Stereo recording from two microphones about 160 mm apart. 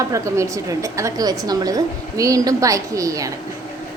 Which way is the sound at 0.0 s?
20° right (ahead or behind).